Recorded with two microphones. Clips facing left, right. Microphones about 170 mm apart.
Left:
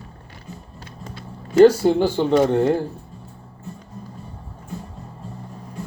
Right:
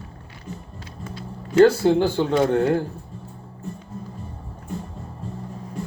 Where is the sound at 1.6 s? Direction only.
15° left (ahead or behind).